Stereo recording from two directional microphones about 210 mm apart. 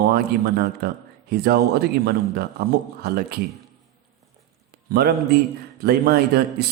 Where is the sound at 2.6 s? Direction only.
50° right (ahead or behind).